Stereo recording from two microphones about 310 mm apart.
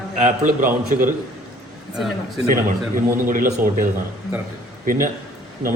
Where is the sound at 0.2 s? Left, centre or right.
Right.